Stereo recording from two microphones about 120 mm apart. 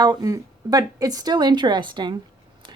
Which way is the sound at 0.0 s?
35° right (ahead or behind).